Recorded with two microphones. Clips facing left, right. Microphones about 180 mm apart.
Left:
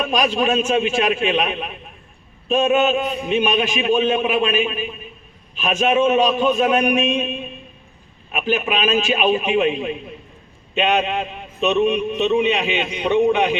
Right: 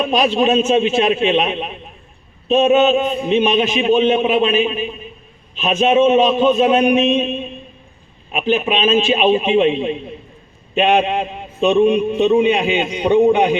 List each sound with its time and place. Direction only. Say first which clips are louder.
0.0 s a man's voice: right 4 dB; 25° right (ahead or behind)